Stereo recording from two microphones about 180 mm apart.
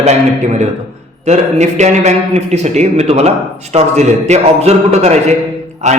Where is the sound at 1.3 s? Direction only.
40° right (ahead or behind).